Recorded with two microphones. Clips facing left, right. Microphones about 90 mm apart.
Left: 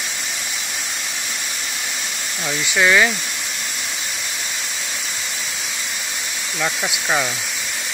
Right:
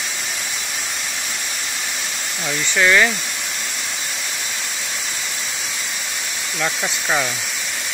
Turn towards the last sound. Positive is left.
turn(degrees=5)  # may be behind; listen again after turning